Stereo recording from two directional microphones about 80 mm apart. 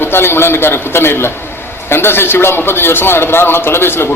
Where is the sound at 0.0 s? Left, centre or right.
Left.